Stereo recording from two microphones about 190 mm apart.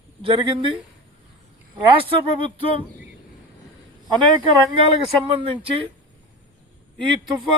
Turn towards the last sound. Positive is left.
turn(degrees=-25)  # may be behind; listen again after turning